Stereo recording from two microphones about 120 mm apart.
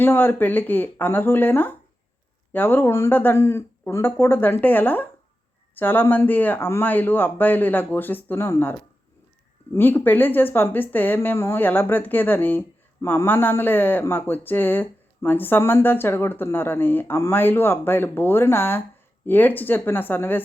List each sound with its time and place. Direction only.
0.0 s speech: 15° left (ahead or behind)
9.7 s speech: 15° left (ahead or behind)